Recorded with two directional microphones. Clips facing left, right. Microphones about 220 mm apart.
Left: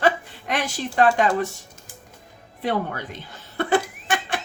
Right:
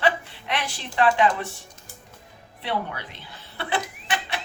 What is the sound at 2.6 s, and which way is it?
Speech, 45° left (ahead or behind).